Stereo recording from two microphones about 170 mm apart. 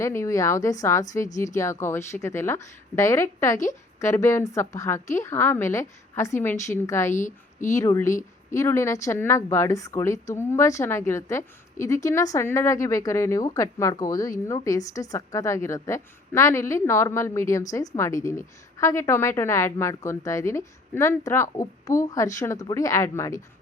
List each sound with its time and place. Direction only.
0.0 s a woman's voice: 15° left (ahead or behind)
7.1 s a woman's voice: 50° left (ahead or behind)
7.7 s a woman's voice: 15° left (ahead or behind)